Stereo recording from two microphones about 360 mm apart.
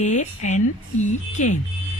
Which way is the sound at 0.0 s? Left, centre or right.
Centre.